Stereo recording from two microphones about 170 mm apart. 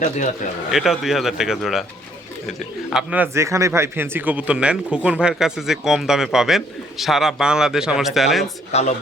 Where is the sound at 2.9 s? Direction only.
10° right (ahead or behind).